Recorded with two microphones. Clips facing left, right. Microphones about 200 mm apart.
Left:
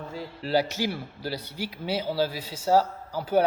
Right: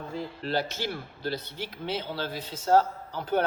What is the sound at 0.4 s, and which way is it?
A man's voice, 10° left (ahead or behind).